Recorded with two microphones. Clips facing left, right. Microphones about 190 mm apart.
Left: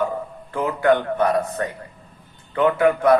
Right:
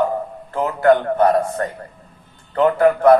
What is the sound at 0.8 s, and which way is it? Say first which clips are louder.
Speech: right 4 dB; 45° right (ahead or behind).